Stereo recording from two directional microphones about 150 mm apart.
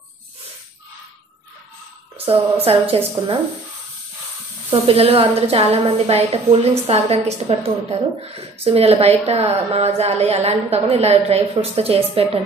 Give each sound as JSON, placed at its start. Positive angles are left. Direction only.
{"t": 2.2, "sound": "a woman's voice", "side_deg": -40}
{"t": 4.6, "sound": "a woman's voice", "side_deg": -35}
{"t": 8.6, "sound": "a woman's voice", "side_deg": -40}